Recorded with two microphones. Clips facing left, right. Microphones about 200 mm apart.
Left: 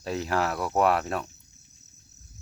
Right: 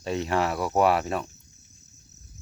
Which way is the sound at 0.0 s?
Centre (ahead or behind).